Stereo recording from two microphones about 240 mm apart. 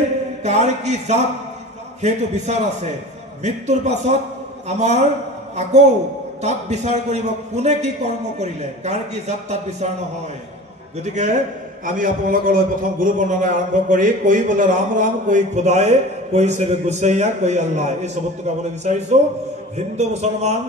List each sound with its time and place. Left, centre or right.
0.4 s a man's voice: right
11.8 s a man's voice: right